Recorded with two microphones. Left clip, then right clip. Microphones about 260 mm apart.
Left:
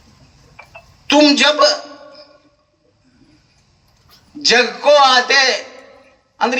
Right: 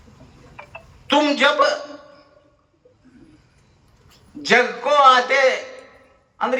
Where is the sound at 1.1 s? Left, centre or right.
Left.